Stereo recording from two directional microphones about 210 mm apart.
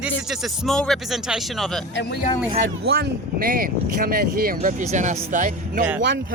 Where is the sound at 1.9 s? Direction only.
55° left (ahead or behind).